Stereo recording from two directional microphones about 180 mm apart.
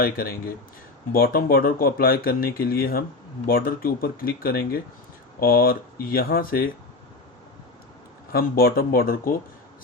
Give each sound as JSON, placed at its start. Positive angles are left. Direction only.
{"t": 0.0, "sound": "speech", "side_deg": 55}
{"t": 8.3, "sound": "speech", "side_deg": 55}